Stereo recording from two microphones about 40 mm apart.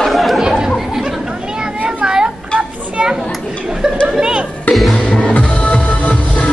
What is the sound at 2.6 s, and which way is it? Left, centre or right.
Children playing, right.